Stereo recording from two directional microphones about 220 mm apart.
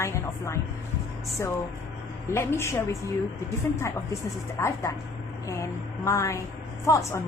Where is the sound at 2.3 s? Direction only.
10° left (ahead or behind).